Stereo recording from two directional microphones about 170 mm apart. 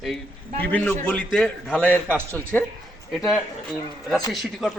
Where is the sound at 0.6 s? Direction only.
10° left (ahead or behind).